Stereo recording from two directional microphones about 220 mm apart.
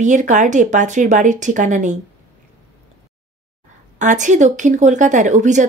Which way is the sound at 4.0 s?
35° right (ahead or behind).